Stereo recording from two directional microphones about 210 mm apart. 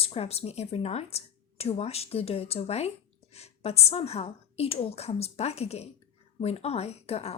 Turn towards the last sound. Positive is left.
turn(degrees=30)  # may be behind; listen again after turning